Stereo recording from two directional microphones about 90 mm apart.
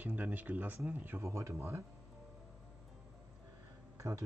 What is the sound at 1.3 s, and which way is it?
Speech, 35° right (ahead or behind).